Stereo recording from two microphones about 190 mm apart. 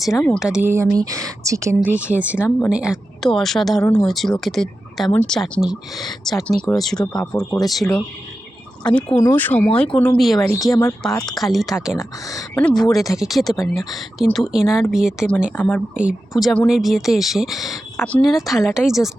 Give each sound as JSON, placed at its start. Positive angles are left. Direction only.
{"t": 0.3, "sound": "speech", "side_deg": -5}
{"t": 10.6, "sound": "speech", "side_deg": 15}
{"t": 11.3, "sound": "speech", "side_deg": 0}
{"t": 11.9, "sound": "speech", "side_deg": 20}
{"t": 12.5, "sound": "speech", "side_deg": 5}